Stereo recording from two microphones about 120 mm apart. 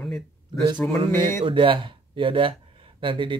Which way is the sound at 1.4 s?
45° right (ahead or behind).